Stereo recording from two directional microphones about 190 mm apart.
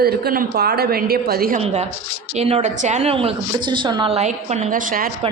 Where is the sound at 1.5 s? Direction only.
35° right (ahead or behind).